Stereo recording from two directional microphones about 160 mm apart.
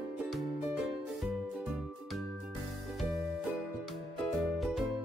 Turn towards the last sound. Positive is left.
turn(degrees=0)  # may be behind; listen again after turning